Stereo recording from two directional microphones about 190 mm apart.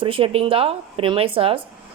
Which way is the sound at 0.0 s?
30° right (ahead or behind).